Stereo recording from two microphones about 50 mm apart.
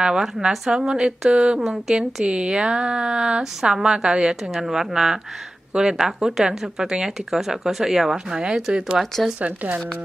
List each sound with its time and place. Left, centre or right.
0.0 s speech: centre
1.9 s speech: centre
2.2 s speech: centre